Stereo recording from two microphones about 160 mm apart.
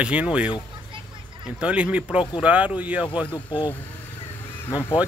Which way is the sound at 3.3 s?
30° left (ahead or behind).